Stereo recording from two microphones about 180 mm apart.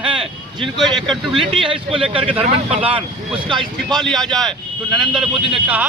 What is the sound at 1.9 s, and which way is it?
Speech, 30° right (ahead or behind).